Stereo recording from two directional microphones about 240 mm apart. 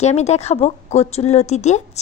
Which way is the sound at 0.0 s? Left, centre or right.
Left.